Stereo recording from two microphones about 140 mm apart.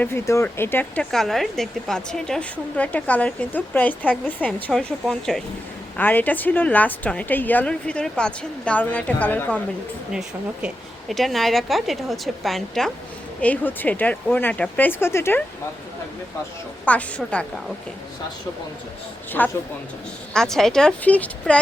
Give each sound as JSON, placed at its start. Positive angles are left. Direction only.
{"t": 0.0, "sound": "a woman's voice", "side_deg": 20}
{"t": 1.1, "sound": "a woman's voice", "side_deg": 0}
{"t": 10.1, "sound": "a woman's voice", "side_deg": -5}
{"t": 13.4, "sound": "a woman's voice", "side_deg": 10}
{"t": 16.8, "sound": "a woman's voice", "side_deg": 10}
{"t": 19.4, "sound": "a woman's voice", "side_deg": 10}